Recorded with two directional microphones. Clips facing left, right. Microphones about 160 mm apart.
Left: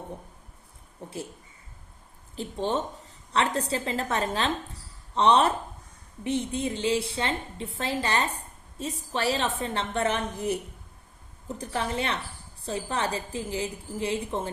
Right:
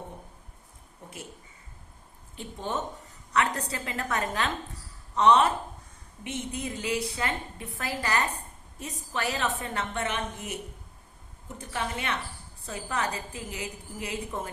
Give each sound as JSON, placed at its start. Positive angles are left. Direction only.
{"t": 1.0, "sound": "a woman's voice", "side_deg": 30}
{"t": 2.3, "sound": "a woman's voice", "side_deg": 30}